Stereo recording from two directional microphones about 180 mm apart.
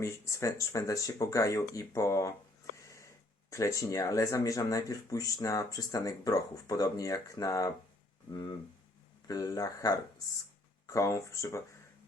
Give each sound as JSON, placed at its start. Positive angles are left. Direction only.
{"t": 0.0, "sound": "speech", "side_deg": 15}
{"t": 2.7, "sound": "a sound", "side_deg": 15}
{"t": 3.5, "sound": "speech", "side_deg": 15}